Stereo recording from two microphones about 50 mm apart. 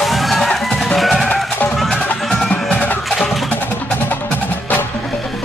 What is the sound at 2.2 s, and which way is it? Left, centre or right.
Music, centre.